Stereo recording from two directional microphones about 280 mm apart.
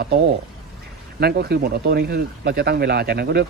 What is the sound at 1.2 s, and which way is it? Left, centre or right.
Speech, right.